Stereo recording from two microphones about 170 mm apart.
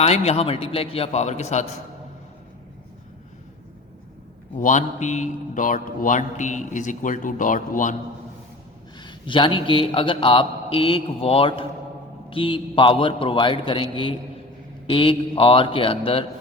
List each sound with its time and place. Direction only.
0.0 s a man's voice: 40° left (ahead or behind)
4.5 s a man's voice: 50° left (ahead or behind)
9.0 s a man's voice: 30° left (ahead or behind)